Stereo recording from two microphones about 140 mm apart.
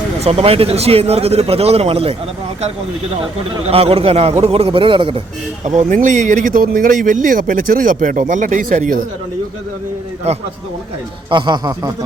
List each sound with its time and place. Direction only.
0.2 s speech: 45° right (ahead or behind)
3.7 s speech: 45° right (ahead or behind)
5.6 s speech: 65° right (ahead or behind)
10.3 s speech: 50° right (ahead or behind)
11.3 s a man's voice: 35° right (ahead or behind)